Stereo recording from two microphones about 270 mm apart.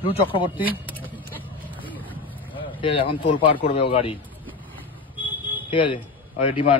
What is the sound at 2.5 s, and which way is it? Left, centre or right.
Vehicle, centre.